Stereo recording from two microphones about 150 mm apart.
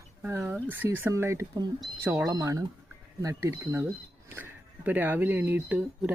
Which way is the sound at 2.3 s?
20° right (ahead or behind).